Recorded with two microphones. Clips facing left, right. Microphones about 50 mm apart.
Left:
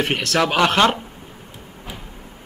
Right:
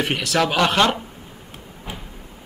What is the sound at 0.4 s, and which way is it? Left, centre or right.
Speech, centre.